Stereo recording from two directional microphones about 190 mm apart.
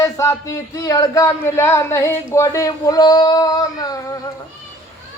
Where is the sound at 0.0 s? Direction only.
15° left (ahead or behind).